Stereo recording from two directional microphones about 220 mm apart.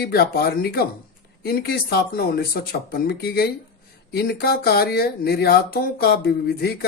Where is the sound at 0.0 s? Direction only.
45° left (ahead or behind).